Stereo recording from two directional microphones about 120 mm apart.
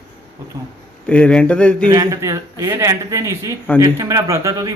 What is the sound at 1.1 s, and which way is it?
Speech, 10° left (ahead or behind).